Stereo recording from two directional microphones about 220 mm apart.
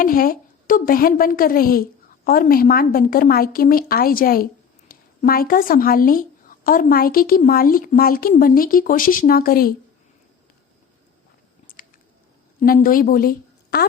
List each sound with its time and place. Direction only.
0.0 s a woman's voice: 40° left (ahead or behind)
11.7 s a sound: 40° left (ahead or behind)
12.5 s a woman's voice: 40° left (ahead or behind)